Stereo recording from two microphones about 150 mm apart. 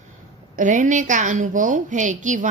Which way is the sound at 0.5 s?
55° right (ahead or behind).